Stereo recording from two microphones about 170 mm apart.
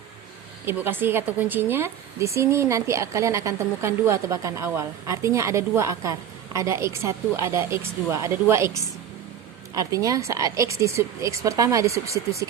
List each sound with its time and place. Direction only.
0.6 s a woman's voice: 10° right (ahead or behind)